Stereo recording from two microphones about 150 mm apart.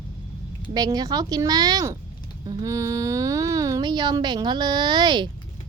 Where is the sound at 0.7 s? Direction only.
25° right (ahead or behind).